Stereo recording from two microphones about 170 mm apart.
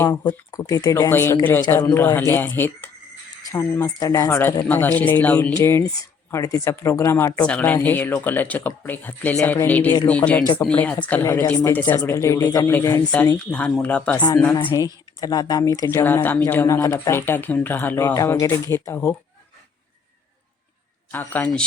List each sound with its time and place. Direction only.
0.0 s speech: 20° left (ahead or behind)
2.1 s speech: 10° left (ahead or behind)
14.6 s speech: 25° left (ahead or behind)
21.1 s speech: 10° left (ahead or behind)